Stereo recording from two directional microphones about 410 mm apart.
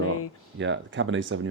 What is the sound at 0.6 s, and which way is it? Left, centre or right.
Speech, right.